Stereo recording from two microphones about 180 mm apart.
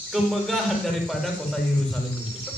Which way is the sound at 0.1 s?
Centre (ahead or behind).